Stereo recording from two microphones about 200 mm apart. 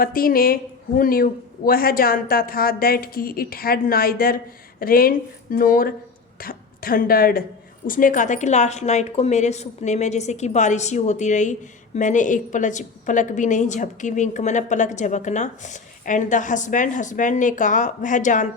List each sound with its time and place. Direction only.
0.0 s a woman's voice: 45° left (ahead or behind)